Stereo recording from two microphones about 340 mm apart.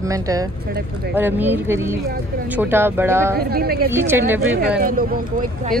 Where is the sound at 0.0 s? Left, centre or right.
Centre.